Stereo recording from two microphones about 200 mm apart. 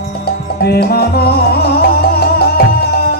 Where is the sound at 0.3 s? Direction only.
50° left (ahead or behind).